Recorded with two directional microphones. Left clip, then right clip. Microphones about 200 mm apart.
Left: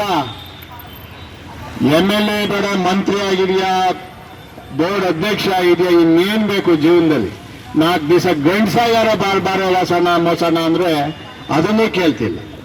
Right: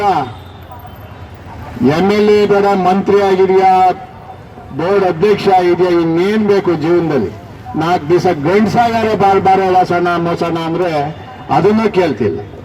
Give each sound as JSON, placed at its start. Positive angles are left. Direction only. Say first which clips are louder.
{"t": 1.9, "sound": "a man's voice", "louder": "right 4 dB", "side_deg": 40}